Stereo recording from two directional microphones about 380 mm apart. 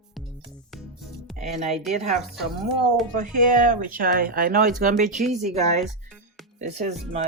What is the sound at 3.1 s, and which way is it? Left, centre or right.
Speech, right.